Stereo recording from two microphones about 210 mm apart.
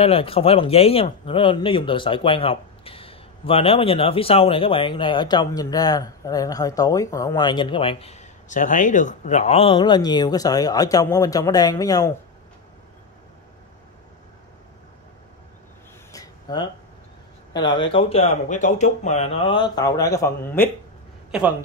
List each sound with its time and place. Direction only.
0.0 s speech: 25° left (ahead or behind)
16.1 s a sound: 20° left (ahead or behind)
17.5 s speech: 20° left (ahead or behind)
21.3 s a man's voice: 5° right (ahead or behind)